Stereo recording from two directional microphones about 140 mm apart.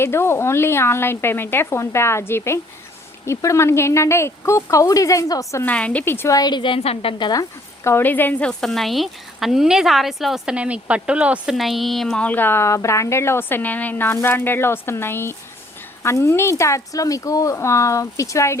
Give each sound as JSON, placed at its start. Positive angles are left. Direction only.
{"t": 0.0, "sound": "speech", "side_deg": 15}
{"t": 5.6, "sound": "speech", "side_deg": 10}
{"t": 7.9, "sound": "speech", "side_deg": 15}